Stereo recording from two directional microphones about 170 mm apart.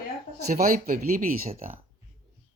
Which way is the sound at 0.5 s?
60° right (ahead or behind).